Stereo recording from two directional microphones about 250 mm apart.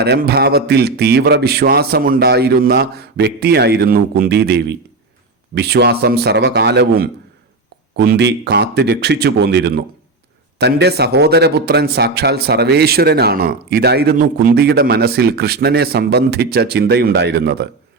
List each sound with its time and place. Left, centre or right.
0.0 s a man's voice: right